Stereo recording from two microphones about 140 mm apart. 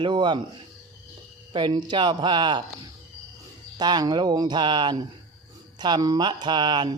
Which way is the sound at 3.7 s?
30° right (ahead or behind).